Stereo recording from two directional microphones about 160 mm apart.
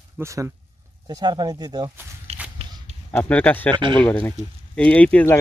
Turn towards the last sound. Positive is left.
turn(degrees=10)  # may be behind; listen again after turning